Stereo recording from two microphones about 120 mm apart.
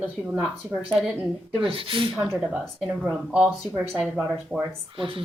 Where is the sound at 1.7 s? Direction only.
50° right (ahead or behind).